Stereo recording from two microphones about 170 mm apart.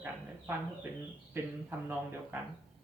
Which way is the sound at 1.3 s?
15° right (ahead or behind).